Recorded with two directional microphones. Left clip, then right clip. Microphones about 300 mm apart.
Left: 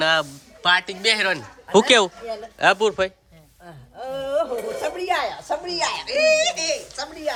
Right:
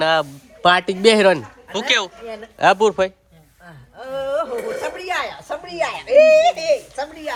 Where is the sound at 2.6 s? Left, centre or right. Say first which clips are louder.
Right 4 dB; centre.